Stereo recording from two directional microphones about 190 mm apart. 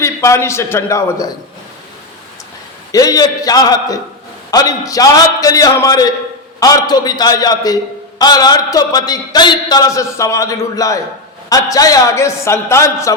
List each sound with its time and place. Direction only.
0.0 s a man's voice: 15° left (ahead or behind)
2.9 s a man's voice: 20° left (ahead or behind)